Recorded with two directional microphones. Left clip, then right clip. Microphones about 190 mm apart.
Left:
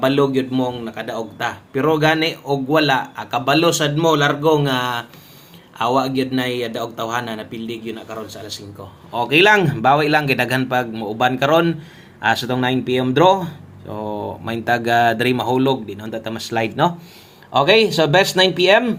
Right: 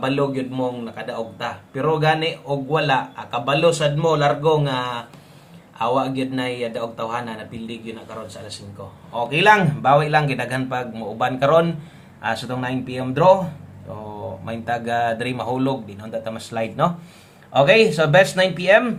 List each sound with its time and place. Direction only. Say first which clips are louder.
0.0 s a man's voice: left 5 dB; 45° left (ahead or behind)
9.1 s a man's voice: left 2 dB; 40° left (ahead or behind); by 18.9 s 20° left (ahead or behind)